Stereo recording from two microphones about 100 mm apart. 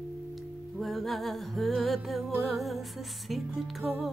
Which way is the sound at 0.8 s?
Centre (ahead or behind).